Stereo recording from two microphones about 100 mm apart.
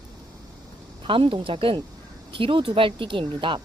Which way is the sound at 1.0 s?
60° right (ahead or behind).